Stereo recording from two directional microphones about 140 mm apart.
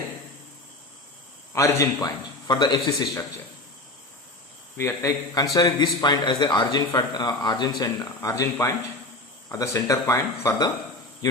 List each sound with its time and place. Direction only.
1.5 s speech: 20° left (ahead or behind)
2.5 s a man's voice: 30° left (ahead or behind)
4.8 s a man's voice: 20° left (ahead or behind)